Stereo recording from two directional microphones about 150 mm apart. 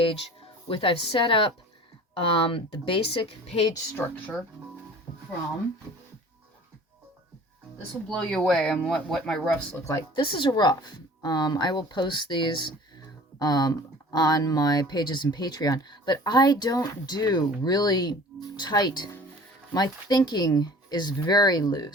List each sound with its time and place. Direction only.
0.7 s speech: 35° left (ahead or behind)
3.9 s speech: 15° left (ahead or behind)
8.1 s speech: 5° left (ahead or behind)
10.2 s speech: 35° left (ahead or behind)